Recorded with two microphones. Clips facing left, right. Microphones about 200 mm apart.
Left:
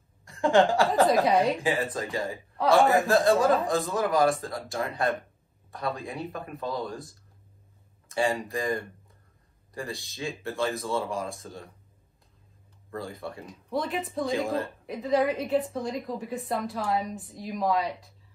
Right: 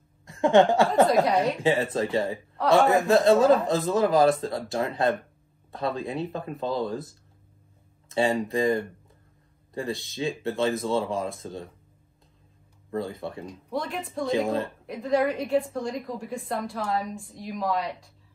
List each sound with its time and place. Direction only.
0.2 s speech: 20° right (ahead or behind)
1.2 s a woman's voice: centre (ahead or behind)
1.6 s speech: 25° right (ahead or behind)
2.5 s a woman's voice: centre (ahead or behind)
3.3 s speech: 25° right (ahead or behind)
9.8 s speech: 20° right (ahead or behind)
12.9 s speech: 20° right (ahead or behind)
13.5 s a woman's voice: centre (ahead or behind)